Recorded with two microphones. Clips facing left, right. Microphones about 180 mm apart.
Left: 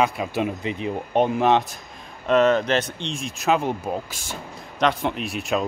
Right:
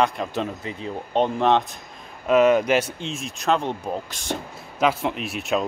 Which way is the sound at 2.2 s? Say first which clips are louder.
Right 1 dB; 10° right (ahead or behind).